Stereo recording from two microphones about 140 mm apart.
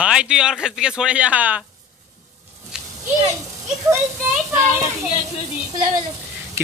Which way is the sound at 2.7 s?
5° right (ahead or behind).